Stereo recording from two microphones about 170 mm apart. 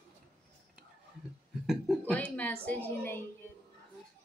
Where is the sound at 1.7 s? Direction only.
5° left (ahead or behind).